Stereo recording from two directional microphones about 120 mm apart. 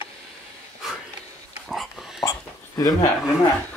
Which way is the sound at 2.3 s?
30° left (ahead or behind).